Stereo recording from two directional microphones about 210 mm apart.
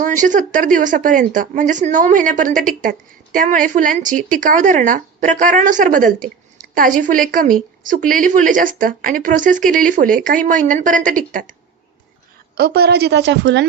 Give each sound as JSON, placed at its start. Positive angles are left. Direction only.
{"t": 0.0, "sound": "a woman's voice", "side_deg": -35}
{"t": 12.5, "sound": "a woman's voice", "side_deg": -50}